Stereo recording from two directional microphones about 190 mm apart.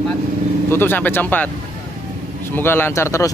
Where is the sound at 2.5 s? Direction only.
10° left (ahead or behind).